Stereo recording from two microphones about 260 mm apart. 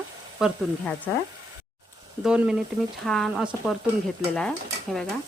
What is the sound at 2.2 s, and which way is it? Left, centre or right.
Speech, centre.